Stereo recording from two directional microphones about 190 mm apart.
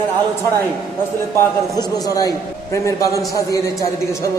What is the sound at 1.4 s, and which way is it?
A man's voice, 20° left (ahead or behind).